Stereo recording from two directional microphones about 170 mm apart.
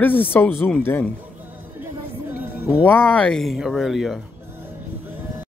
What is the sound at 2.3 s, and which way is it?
Music, 10° right (ahead or behind).